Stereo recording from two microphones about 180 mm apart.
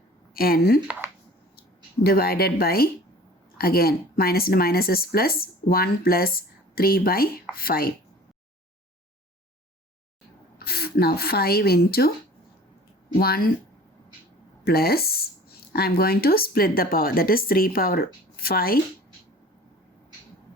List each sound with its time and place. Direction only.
0.3 s speech: 55° left (ahead or behind)
2.0 s speech: 60° left (ahead or behind)
10.6 s a woman's voice: 60° left (ahead or behind)
13.1 s speech: 60° left (ahead or behind)
14.6 s speech: 60° left (ahead or behind)